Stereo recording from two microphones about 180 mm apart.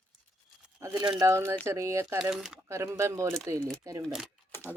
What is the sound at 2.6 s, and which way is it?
Speech, 15° right (ahead or behind).